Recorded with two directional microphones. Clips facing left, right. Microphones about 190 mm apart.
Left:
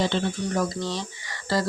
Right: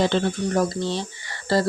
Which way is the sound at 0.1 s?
40° right (ahead or behind).